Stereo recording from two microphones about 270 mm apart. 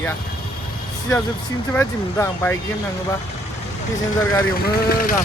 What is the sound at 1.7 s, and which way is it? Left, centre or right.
Speech, centre.